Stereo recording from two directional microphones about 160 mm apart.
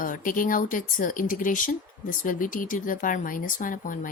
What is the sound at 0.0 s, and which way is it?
Speech, 60° left (ahead or behind).